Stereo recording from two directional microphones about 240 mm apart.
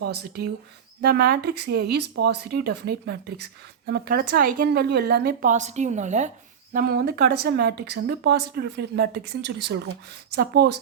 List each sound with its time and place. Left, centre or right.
0.1 s speech: right